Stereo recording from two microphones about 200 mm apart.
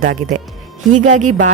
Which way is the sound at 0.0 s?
40° right (ahead or behind).